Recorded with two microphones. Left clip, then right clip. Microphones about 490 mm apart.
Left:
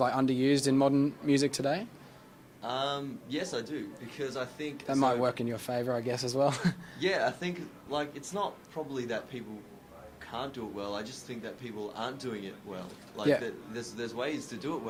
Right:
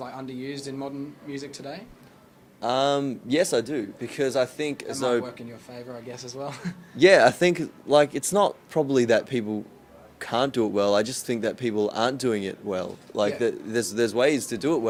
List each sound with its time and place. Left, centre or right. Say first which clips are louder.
0.0 s speech: left 8 dB; left
2.6 s speech: right 10 dB; right
5.2 s speech: left 7 dB; left
7.0 s speech: right 14 dB; right